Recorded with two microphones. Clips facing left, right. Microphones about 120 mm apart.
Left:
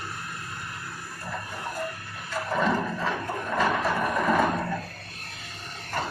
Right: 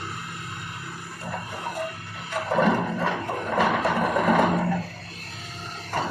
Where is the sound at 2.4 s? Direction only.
75° right (ahead or behind).